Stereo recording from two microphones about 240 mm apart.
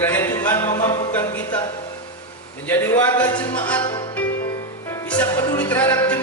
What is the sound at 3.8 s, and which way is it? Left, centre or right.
Music, centre.